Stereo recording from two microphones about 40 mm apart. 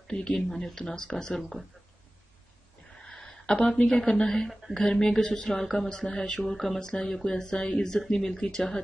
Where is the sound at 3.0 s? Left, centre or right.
Centre.